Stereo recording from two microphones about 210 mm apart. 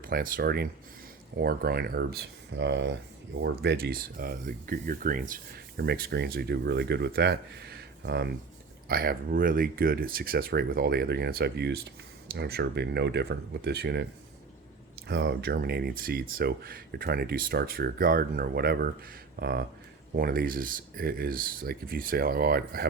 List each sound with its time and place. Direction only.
0.0 s speech: 45° right (ahead or behind)